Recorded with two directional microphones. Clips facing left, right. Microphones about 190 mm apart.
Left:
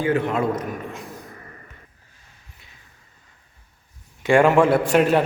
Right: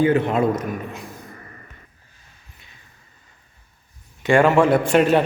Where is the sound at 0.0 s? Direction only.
20° right (ahead or behind).